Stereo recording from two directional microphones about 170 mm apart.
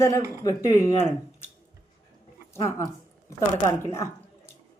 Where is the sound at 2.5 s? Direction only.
15° left (ahead or behind).